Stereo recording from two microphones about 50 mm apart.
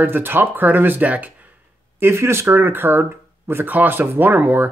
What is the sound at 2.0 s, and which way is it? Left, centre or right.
Speech, right.